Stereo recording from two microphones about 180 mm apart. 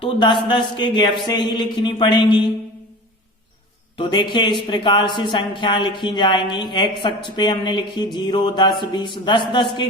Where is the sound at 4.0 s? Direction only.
25° left (ahead or behind).